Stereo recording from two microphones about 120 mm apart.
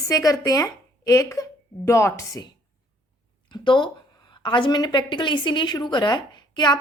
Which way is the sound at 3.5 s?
40° left (ahead or behind).